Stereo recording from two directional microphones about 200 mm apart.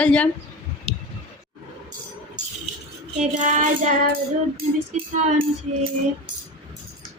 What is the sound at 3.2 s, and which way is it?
Child singing, 40° right (ahead or behind).